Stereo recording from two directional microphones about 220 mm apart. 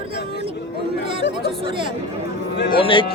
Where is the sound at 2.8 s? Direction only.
25° left (ahead or behind).